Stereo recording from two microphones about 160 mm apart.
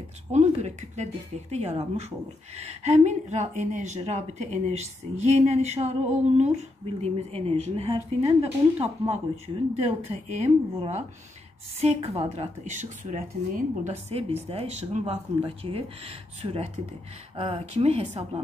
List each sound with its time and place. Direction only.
0.3 s a woman's voice: 45° right (ahead or behind)